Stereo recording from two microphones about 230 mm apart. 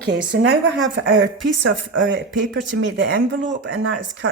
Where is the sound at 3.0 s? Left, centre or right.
Right.